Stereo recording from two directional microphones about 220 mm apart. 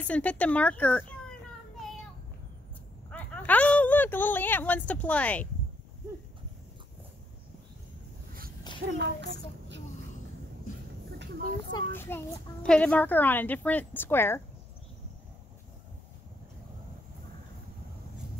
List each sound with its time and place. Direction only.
0.0 s speech: 5° left (ahead or behind)
3.1 s speech: 5° left (ahead or behind)
8.9 s a child's voice: 55° right (ahead or behind)
11.9 s a woman's voice: 10° left (ahead or behind)